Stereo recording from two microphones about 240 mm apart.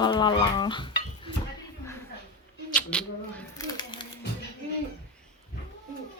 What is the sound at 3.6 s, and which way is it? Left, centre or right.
Crumpling, centre.